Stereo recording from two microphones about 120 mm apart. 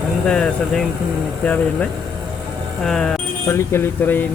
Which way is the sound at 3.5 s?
20° left (ahead or behind).